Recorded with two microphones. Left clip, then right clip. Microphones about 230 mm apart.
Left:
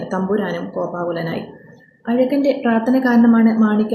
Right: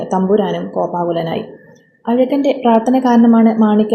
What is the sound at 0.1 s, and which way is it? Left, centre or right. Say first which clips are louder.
A woman's voice: right 6 dB; centre.